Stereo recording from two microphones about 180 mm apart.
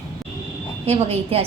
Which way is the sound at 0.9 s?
35° right (ahead or behind).